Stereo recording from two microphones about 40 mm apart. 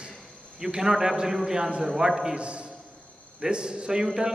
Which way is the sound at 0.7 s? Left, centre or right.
Centre.